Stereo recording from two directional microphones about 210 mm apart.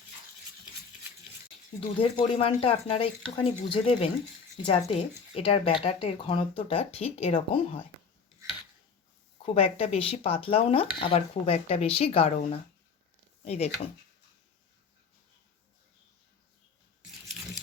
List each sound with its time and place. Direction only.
2.0 s speech: 25° left (ahead or behind)
9.4 s speech: 25° left (ahead or behind)
13.4 s speech: 30° left (ahead or behind)
17.0 s biting: centre (ahead or behind)